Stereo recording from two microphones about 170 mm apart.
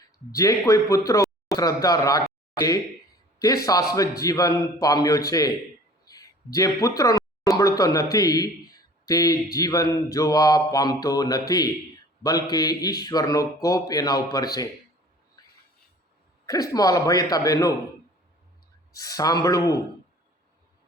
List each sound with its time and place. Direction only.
0.3 s a man's voice: 20° left (ahead or behind)
16.5 s a man's voice: 20° left (ahead or behind)
18.9 s a man's voice: 20° left (ahead or behind)